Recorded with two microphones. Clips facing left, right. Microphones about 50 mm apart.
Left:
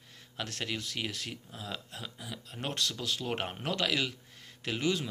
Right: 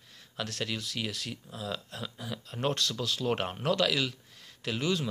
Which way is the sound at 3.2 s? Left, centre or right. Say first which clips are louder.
Right 8 dB; centre.